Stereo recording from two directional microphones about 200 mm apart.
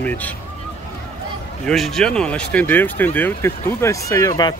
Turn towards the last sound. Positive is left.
turn(degrees=15)  # may be behind; listen again after turning